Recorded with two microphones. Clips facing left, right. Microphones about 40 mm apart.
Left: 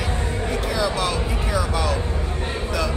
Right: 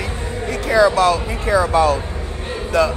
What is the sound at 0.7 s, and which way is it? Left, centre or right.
Speech, right.